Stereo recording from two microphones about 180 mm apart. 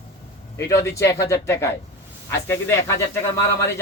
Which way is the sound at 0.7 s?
15° left (ahead or behind).